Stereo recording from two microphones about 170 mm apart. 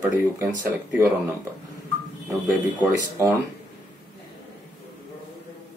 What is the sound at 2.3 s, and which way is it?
Speech, 10° right (ahead or behind).